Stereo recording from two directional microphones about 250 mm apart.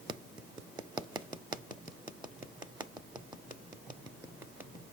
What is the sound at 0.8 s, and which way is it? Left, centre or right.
Hands, centre.